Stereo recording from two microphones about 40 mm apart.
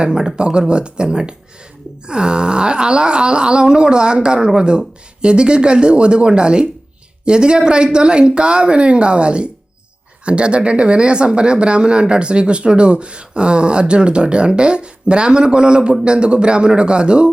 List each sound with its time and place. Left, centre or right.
0.0 s speech: right